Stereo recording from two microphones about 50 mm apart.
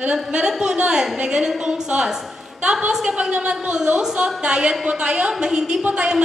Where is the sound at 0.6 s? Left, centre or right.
Centre.